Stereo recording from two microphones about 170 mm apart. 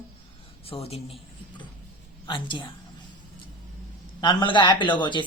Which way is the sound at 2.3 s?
30° left (ahead or behind).